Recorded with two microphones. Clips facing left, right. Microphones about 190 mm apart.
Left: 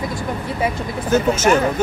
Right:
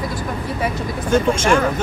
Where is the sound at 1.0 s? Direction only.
5° left (ahead or behind).